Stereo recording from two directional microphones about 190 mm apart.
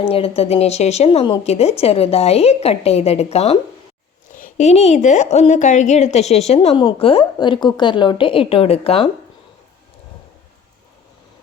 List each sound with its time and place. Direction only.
0.1 s a woman's voice: 30° left (ahead or behind)